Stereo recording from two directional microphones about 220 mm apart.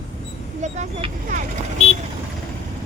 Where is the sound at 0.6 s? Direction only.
30° right (ahead or behind).